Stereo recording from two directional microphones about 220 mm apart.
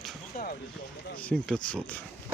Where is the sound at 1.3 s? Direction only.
Centre (ahead or behind).